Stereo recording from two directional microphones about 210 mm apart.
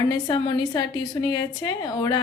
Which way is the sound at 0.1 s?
20° left (ahead or behind).